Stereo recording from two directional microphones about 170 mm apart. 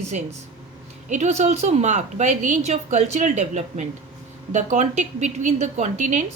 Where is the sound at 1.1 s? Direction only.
45° right (ahead or behind).